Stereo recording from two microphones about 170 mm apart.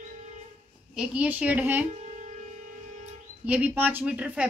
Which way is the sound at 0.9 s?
10° right (ahead or behind).